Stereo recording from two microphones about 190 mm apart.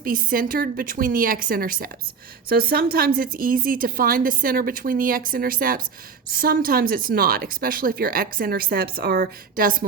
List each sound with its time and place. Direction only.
0.0 s speech: 50° right (ahead or behind)